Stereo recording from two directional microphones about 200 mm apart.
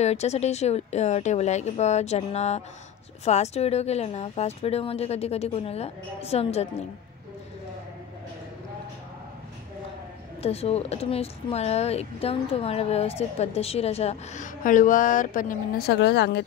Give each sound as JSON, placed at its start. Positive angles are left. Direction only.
{"t": 0.0, "sound": "speech", "side_deg": 35}
{"t": 10.4, "sound": "speech", "side_deg": 30}